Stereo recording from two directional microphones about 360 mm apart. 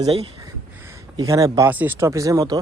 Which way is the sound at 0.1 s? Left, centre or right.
Centre.